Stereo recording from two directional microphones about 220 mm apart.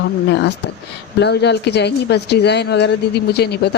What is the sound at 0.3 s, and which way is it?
Speech, 50° left (ahead or behind).